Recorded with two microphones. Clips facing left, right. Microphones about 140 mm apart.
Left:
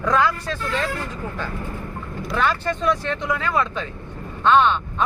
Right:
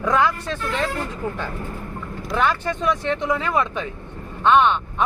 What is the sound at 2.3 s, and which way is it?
Speech, 15° right (ahead or behind).